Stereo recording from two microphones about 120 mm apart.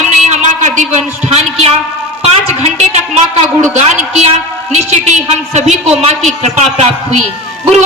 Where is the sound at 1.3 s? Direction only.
60° right (ahead or behind).